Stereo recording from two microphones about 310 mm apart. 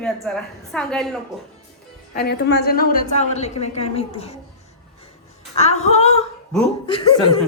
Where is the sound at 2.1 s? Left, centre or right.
Left.